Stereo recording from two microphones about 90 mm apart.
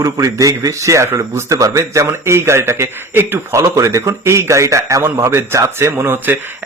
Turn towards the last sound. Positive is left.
turn(degrees=-25)  # may be behind; listen again after turning